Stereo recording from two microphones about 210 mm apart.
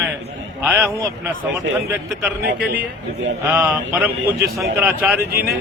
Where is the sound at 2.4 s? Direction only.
45° right (ahead or behind).